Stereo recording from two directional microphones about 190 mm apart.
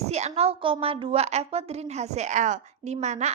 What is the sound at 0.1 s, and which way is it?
A woman's voice, 35° right (ahead or behind).